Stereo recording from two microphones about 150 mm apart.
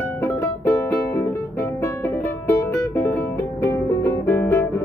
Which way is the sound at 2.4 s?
15° left (ahead or behind).